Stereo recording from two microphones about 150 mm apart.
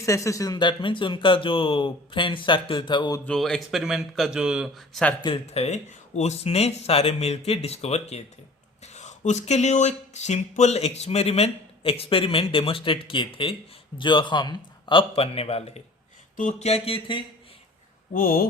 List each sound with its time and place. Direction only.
0.0 s speech: 20° left (ahead or behind)
3.2 s a man's voice: 5° left (ahead or behind)
5.2 s speech: 40° left (ahead or behind)
18.1 s speech: 65° left (ahead or behind)